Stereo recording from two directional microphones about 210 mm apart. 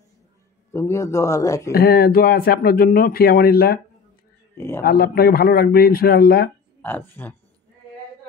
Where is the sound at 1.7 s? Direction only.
45° left (ahead or behind).